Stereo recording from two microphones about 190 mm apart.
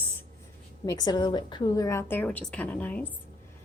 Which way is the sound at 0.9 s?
20° left (ahead or behind).